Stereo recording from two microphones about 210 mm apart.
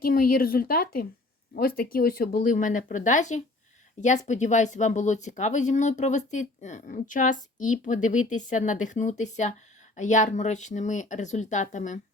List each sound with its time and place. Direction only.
0.0 s a woman's voice: 45° left (ahead or behind)